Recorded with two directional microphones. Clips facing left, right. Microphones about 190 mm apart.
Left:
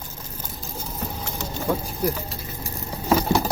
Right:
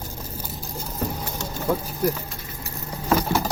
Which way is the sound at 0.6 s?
Centre (ahead or behind).